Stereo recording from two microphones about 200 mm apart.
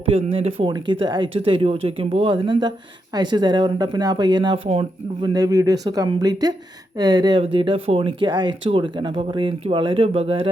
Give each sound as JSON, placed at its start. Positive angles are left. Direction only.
{"t": 0.0, "sound": "speech", "side_deg": -25}